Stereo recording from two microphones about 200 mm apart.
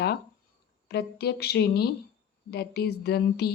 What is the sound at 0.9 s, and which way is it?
A woman's voice, 55° left (ahead or behind).